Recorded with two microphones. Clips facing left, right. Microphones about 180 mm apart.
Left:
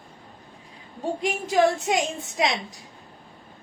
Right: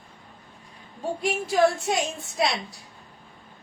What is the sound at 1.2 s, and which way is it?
A woman's voice, 15° left (ahead or behind).